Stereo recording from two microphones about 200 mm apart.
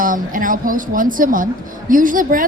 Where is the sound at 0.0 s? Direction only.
40° right (ahead or behind).